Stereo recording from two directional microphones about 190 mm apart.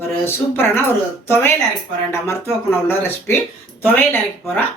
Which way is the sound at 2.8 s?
10° left (ahead or behind).